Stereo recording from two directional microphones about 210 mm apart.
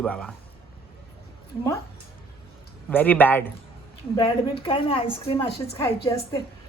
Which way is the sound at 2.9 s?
10° left (ahead or behind).